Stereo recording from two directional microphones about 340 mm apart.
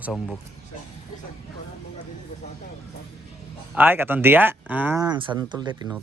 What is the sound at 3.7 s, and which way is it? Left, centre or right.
Speech, centre.